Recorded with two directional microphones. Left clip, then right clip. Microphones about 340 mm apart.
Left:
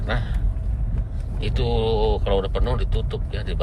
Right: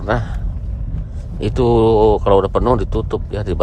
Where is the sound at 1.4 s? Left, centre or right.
Centre.